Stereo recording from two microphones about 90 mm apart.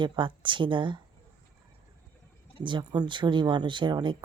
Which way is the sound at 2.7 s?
55° right (ahead or behind).